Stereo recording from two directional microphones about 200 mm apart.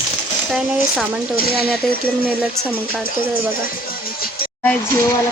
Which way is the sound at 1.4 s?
50° left (ahead or behind).